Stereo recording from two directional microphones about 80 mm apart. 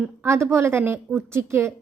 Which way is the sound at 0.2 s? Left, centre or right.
Right.